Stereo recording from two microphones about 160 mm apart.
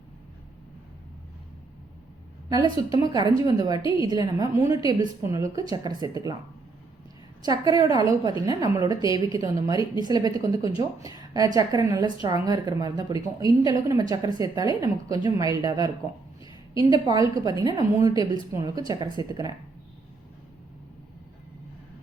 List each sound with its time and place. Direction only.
2.5 s a woman's voice: 25° right (ahead or behind)
7.4 s a woman's voice: 25° right (ahead or behind)
16.9 s a woman's voice: 25° right (ahead or behind)